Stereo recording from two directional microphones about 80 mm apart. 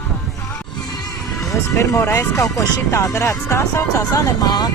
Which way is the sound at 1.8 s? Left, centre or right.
Left.